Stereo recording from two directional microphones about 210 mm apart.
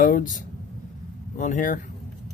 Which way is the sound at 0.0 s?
40° left (ahead or behind).